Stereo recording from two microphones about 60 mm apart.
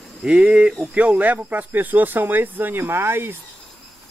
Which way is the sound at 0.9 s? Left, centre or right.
Right.